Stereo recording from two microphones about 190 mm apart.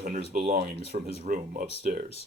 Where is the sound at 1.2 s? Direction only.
45° right (ahead or behind).